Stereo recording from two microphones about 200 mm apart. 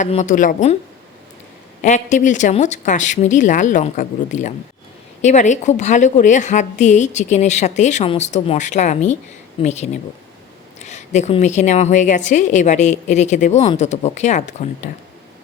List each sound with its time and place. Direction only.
0.0 s a woman's voice: 35° left (ahead or behind)
1.8 s a woman's voice: 35° left (ahead or behind)